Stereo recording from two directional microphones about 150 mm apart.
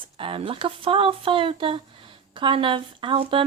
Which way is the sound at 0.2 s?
35° right (ahead or behind).